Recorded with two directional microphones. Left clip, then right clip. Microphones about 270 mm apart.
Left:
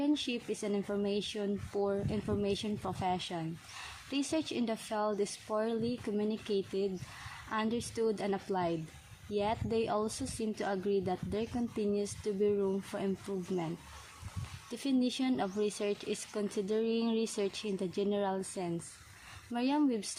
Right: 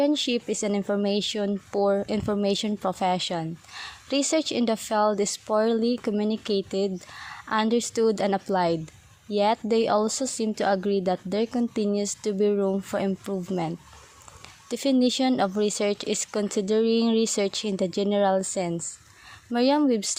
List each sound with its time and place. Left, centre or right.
0.0 s speech: right
14.7 s speech: right